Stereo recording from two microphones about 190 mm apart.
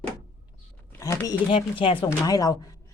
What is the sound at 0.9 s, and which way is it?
A woman's voice, 15° left (ahead or behind).